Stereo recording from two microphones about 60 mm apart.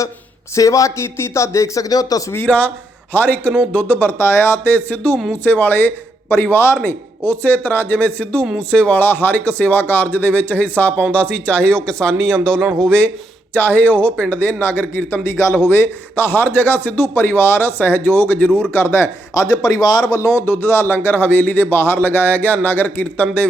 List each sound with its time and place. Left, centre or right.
0.5 s speech: left
2.5 s a man's voice: left
4.2 s speech: left
5.1 s speech: centre
5.4 s a man's voice: left
9.0 s speech: left
13.5 s a man's voice: left
15.3 s speech: left
15.5 s a man's voice: left
18.7 s speech: left
19.3 s a man's voice: left
20.4 s a man's voice: left